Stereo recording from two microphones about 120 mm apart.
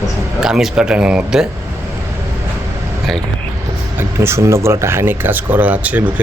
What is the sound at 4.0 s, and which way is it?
Speech, 20° right (ahead or behind).